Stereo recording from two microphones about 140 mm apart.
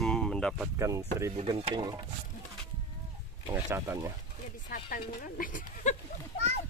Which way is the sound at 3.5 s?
20° right (ahead or behind).